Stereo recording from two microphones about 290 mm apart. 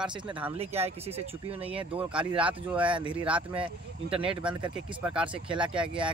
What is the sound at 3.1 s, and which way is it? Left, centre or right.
Speech, centre.